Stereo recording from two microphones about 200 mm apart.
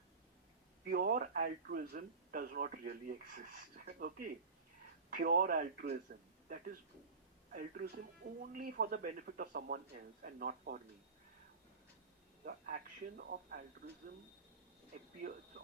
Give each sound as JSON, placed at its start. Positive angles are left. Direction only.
{"t": 0.9, "sound": "speech", "side_deg": -45}
{"t": 7.5, "sound": "speech", "side_deg": -45}
{"t": 12.5, "sound": "speech", "side_deg": -45}
{"t": 15.2, "sound": "speech", "side_deg": -45}